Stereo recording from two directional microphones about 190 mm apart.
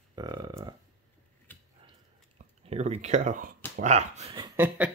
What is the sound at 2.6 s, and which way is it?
Speech, 35° right (ahead or behind).